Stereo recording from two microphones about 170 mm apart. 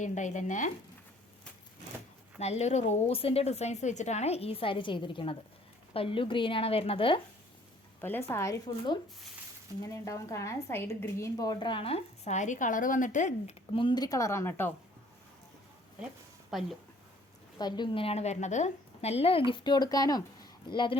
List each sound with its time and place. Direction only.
0.0 s speech: 45° left (ahead or behind)
2.4 s a woman's voice: 40° left (ahead or behind)
8.0 s a woman's voice: 10° left (ahead or behind); by 13.6 s 45° left (ahead or behind)
13.7 s speech: 25° left (ahead or behind)
16.5 s speech: centre (ahead or behind)
17.6 s a woman's voice: 25° left (ahead or behind)